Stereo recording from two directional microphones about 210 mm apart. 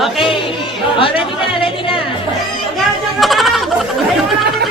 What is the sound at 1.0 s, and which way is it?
Chatter, 25° left (ahead or behind).